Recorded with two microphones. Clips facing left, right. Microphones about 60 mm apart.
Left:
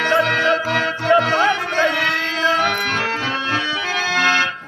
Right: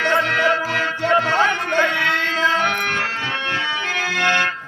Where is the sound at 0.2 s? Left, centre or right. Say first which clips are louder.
Left 1 dB; centre.